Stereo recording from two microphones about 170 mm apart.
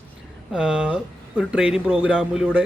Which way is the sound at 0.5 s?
5° right (ahead or behind).